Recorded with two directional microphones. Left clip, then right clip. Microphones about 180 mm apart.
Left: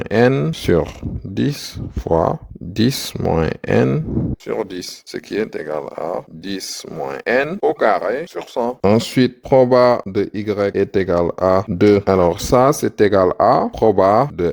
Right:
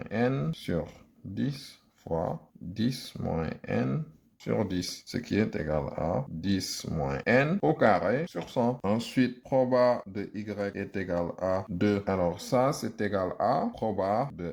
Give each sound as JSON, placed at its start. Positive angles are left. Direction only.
{"t": 0.0, "sound": "speech", "side_deg": 65}
{"t": 2.0, "sound": "speech", "side_deg": 60}